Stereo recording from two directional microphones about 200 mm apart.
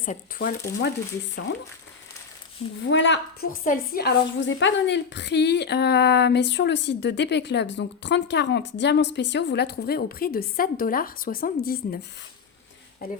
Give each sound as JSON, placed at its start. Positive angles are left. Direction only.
{"t": 0.0, "sound": "speech", "side_deg": 40}
{"t": 2.8, "sound": "a woman's voice", "side_deg": 70}
{"t": 3.5, "sound": "a woman's voice", "side_deg": 45}
{"t": 13.0, "sound": "speech", "side_deg": 50}